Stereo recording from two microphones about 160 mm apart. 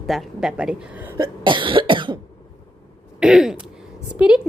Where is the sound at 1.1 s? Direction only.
30° right (ahead or behind).